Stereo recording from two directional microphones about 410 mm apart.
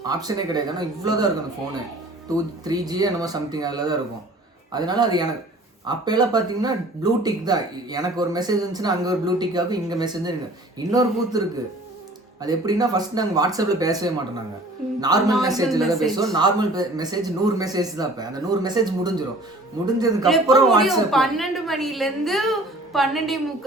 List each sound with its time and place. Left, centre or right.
0.0 s speech: centre
2.3 s a woman's voice: centre